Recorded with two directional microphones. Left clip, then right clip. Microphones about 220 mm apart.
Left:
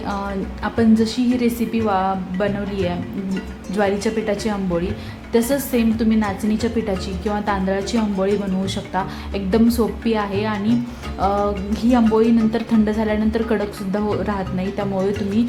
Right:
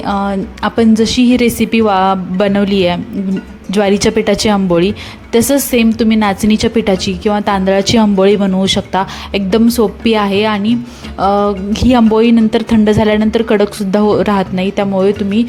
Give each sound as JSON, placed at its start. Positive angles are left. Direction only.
{"t": 0.0, "sound": "a woman's voice", "side_deg": -30}